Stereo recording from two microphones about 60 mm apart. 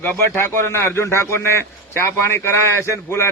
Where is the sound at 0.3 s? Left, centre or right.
Left.